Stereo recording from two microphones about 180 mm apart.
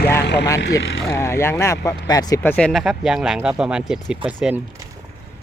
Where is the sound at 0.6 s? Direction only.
85° left.